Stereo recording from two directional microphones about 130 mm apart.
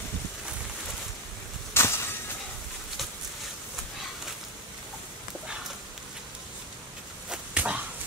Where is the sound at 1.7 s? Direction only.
20° left (ahead or behind).